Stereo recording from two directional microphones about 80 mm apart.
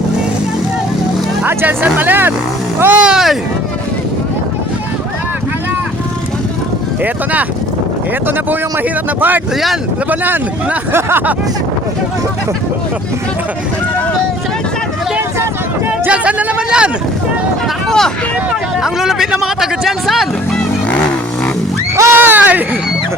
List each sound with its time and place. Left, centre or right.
1.5 s speech: right
3.0 s speech: centre
10.1 s speech: right
16.0 s speech: centre
17.8 s speech: centre
18.8 s speech: centre
21.9 s a sound: right
22.2 s a sound: right